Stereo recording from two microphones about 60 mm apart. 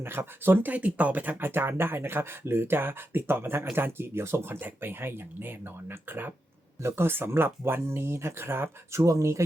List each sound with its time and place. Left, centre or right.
0.0 s speech: right